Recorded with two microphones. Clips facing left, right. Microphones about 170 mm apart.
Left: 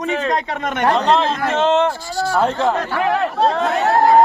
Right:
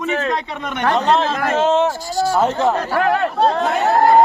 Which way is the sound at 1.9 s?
40° right (ahead or behind).